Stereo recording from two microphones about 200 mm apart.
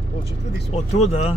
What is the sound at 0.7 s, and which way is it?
Speech, 35° left (ahead or behind).